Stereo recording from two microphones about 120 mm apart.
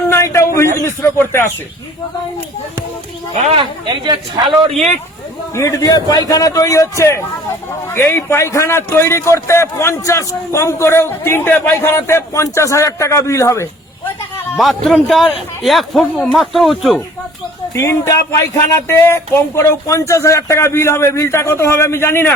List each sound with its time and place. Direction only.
0.1 s a sound: 25° left (ahead or behind)
0.9 s a man's voice: 20° left (ahead or behind)
3.4 s speech: 45° right (ahead or behind)
5.5 s a man's voice: 25° left (ahead or behind)
14.5 s a man's voice: centre (ahead or behind)
17.7 s a man's voice: 25° left (ahead or behind)